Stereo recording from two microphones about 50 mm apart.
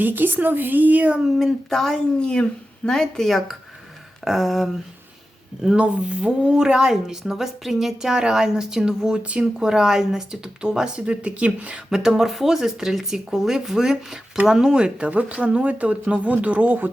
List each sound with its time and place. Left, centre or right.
0.0 s speech: right
1.4 s a sound: centre
1.8 s speech: centre
4.2 s a sound: centre
5.7 s speech: right
9.6 s speech: centre
11.9 s speech: centre; by 16.9 s right